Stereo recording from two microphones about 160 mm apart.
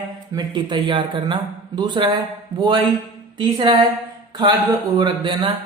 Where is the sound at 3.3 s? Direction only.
30° right (ahead or behind).